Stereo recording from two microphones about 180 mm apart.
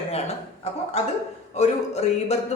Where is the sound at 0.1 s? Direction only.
35° left (ahead or behind).